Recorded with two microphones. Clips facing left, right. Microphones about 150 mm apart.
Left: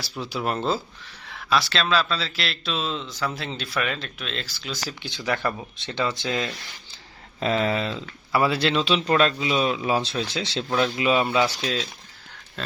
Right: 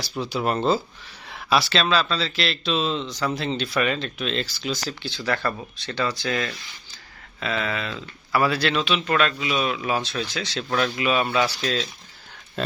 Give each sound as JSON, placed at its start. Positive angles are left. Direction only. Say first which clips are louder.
{"t": 0.0, "sound": "speech", "louder": "right 3 dB", "side_deg": 5}
{"t": 1.3, "sound": "a sound", "louder": "right 2 dB", "side_deg": -10}
{"t": 1.7, "sound": "speech", "louder": "right 1 dB", "side_deg": 0}
{"t": 5.0, "sound": "speech", "louder": "even", "side_deg": 15}
{"t": 7.3, "sound": "speech", "louder": "left 4 dB", "side_deg": 35}
{"t": 11.6, "sound": "speech", "louder": "right 2 dB", "side_deg": 10}